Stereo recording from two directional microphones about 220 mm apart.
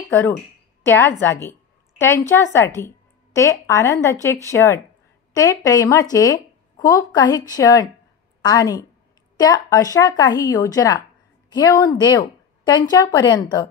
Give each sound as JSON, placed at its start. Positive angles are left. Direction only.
{"t": 0.8, "sound": "a woman's voice", "side_deg": 10}